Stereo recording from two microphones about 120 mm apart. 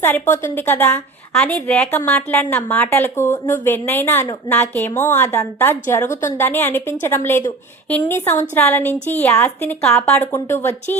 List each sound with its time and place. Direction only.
0.0 s a woman's voice: 20° left (ahead or behind)
1.3 s a woman's voice: 5° left (ahead or behind)